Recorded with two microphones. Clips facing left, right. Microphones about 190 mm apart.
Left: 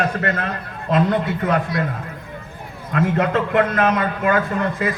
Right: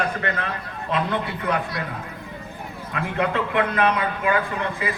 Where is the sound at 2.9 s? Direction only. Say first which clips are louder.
Left 5 dB; 45° left (ahead or behind).